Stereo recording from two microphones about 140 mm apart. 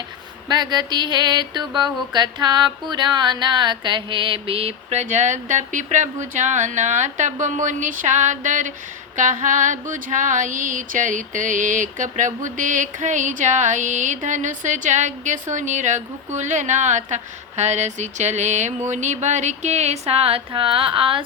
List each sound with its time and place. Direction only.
0.4 s mantra: 30° right (ahead or behind); by 8.7 s 65° right (ahead or behind)
9.1 s a sound: 65° right (ahead or behind)
18.9 s mantra: 60° right (ahead or behind); by 21.2 s 40° right (ahead or behind)